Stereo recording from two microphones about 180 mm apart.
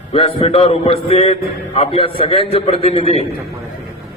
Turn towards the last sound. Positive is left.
turn(degrees=35)  # may be behind; listen again after turning